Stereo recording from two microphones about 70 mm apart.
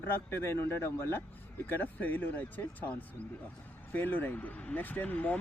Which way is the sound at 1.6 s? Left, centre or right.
Left.